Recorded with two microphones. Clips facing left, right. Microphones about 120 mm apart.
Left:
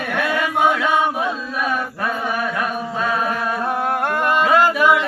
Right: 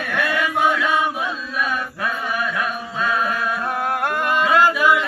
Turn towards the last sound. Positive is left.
turn(degrees=45)  # may be behind; listen again after turning